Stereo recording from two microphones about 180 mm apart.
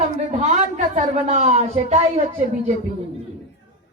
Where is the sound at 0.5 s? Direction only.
40° right (ahead or behind).